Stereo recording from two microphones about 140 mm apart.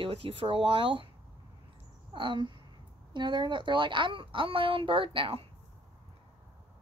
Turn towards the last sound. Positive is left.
turn(degrees=-40)  # may be behind; listen again after turning